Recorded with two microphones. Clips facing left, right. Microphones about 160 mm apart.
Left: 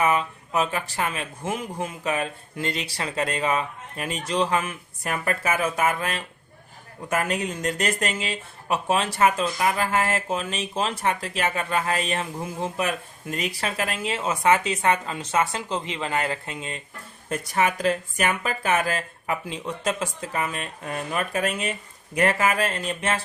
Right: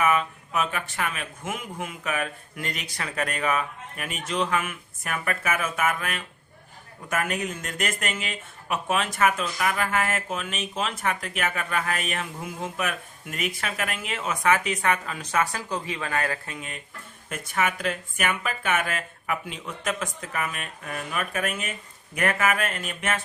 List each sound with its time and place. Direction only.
0.0 s speech: 30° left (ahead or behind)